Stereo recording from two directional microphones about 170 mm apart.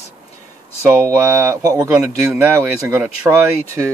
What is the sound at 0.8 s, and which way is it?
Speech, 15° right (ahead or behind).